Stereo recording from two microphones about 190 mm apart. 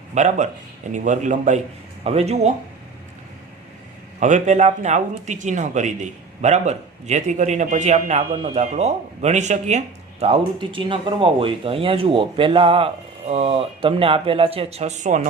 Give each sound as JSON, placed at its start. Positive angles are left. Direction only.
{"t": 0.1, "sound": "speech", "side_deg": -40}
{"t": 4.2, "sound": "speech", "side_deg": -40}